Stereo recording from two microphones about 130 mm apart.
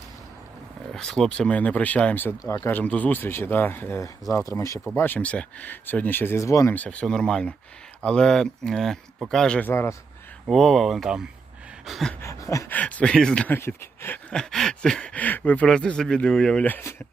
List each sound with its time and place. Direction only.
0.9 s speech: 5° left (ahead or behind)
2.4 s speech: 25° left (ahead or behind)
4.4 s a sound: 25° left (ahead or behind)
4.9 s speech: 15° left (ahead or behind)
6.7 s speech: 10° left (ahead or behind)
10.5 s speech: centre (ahead or behind)
12.2 s a sound: 25° left (ahead or behind)
12.7 s speech: 10° left (ahead or behind)
13.6 s speech: 20° left (ahead or behind)
14.3 s speech: 5° left (ahead or behind)